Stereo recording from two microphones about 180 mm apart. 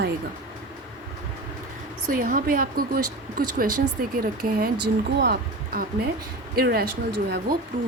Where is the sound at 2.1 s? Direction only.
50° right (ahead or behind).